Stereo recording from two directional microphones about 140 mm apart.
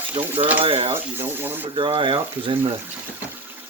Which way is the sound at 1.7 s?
35° right (ahead or behind).